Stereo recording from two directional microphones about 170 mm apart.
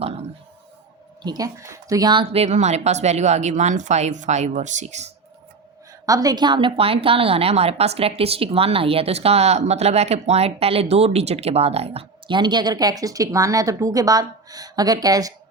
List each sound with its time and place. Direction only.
1.2 s a woman's voice: 25° right (ahead or behind); by 5.0 s 45° right (ahead or behind)
6.1 s a woman's voice: 20° right (ahead or behind)